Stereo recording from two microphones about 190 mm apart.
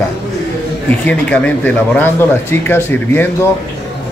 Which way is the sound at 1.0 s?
5° left (ahead or behind).